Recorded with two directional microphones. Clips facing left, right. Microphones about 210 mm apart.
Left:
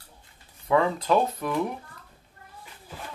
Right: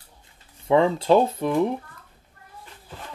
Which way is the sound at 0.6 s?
25° right (ahead or behind).